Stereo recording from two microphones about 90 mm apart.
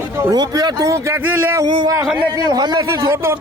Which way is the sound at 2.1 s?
50° right (ahead or behind).